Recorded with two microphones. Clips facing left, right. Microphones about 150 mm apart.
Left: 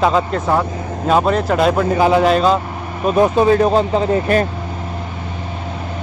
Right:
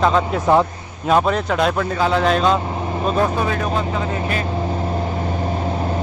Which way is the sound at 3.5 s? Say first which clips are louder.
Left 8 dB; 35° left (ahead or behind).